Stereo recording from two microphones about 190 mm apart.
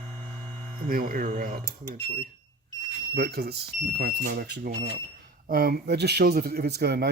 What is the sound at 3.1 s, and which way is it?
Speech, 55° right (ahead or behind).